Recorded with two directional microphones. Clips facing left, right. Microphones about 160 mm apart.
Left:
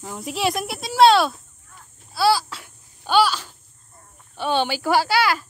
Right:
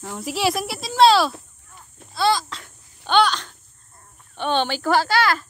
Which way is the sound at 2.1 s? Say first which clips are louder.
Left 1 dB; 5° left (ahead or behind).